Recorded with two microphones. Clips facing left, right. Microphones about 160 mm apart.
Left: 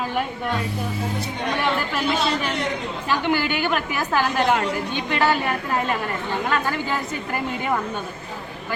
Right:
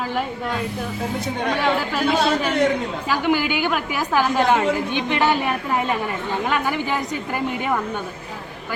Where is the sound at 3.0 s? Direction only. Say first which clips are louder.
Right 1 dB; 10° right (ahead or behind).